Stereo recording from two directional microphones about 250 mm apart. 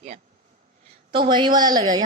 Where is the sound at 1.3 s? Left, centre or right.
Centre.